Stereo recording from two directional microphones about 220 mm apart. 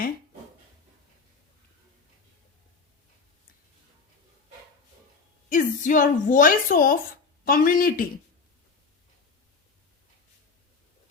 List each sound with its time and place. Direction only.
5.5 s a woman's voice: 35° left (ahead or behind)